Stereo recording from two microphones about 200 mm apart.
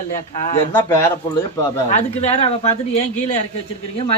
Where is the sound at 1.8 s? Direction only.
35° left (ahead or behind).